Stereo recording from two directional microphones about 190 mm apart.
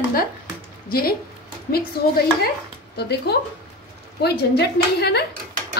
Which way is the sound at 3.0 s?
60° left (ahead or behind).